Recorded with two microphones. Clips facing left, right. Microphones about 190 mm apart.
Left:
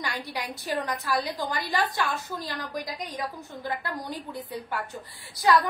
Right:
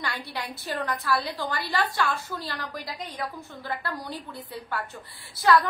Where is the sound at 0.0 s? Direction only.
15° left (ahead or behind).